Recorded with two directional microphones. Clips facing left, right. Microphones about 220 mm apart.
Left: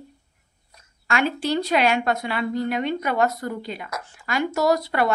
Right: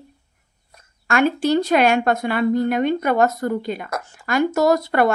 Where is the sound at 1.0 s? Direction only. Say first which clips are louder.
Right 5 dB; 45° right (ahead or behind).